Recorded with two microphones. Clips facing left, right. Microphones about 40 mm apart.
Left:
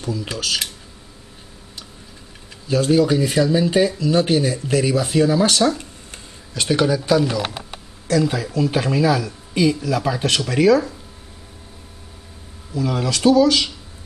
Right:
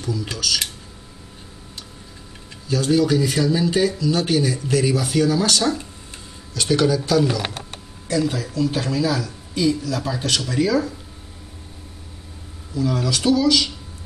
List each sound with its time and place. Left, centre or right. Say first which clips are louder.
0.0 s speech: left 1 dB; left
2.7 s speech: left 2 dB; left
8.5 s speech: left 3 dB; left
12.7 s speech: even; left